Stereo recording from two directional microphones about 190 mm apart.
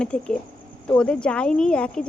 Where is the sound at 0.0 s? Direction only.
5° left (ahead or behind).